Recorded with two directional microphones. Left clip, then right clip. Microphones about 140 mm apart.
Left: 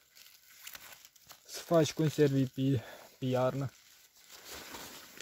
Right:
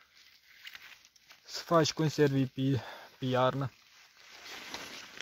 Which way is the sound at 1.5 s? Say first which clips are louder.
Right 1 dB; 10° left (ahead or behind).